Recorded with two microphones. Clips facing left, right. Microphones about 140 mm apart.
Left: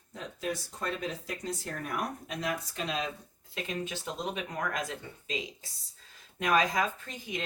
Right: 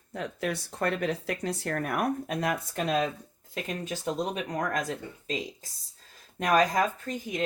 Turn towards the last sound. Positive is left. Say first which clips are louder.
# right 6 dB
turn(degrees=-45)  # may be behind; listen again after turning